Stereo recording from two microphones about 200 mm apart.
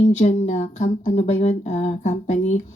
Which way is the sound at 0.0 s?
35° left (ahead or behind).